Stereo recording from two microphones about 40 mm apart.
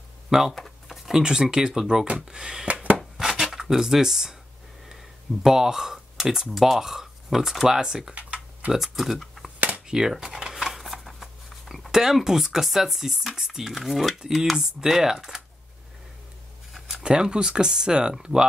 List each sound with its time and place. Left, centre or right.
0.3 s speech: centre
0.6 s computer keyboard: centre
1.2 s speech: centre
2.7 s a sound: right
3.0 s a sound: centre
3.5 s speech: centre
5.4 s speech: centre
8.1 s typing: right
8.7 s speech: centre
9.2 s a sound: centre
9.8 s shuffling cards: centre
11.9 s speech: centre
17.0 s speech: right